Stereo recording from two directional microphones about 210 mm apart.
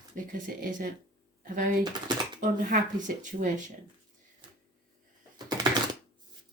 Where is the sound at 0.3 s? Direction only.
40° right (ahead or behind).